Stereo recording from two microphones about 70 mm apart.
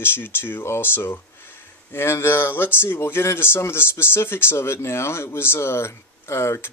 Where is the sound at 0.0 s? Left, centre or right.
Left.